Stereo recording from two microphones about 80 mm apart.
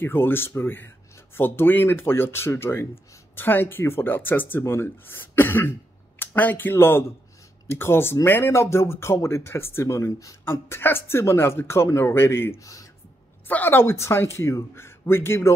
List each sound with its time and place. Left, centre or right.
0.0 s speech: left